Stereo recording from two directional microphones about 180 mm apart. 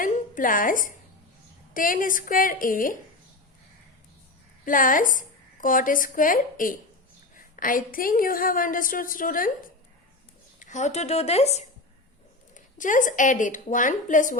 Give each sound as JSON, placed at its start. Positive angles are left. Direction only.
{"t": 0.0, "sound": "a woman's voice", "side_deg": 50}
{"t": 4.6, "sound": "a woman's voice", "side_deg": 50}
{"t": 10.6, "sound": "a woman's voice", "side_deg": 40}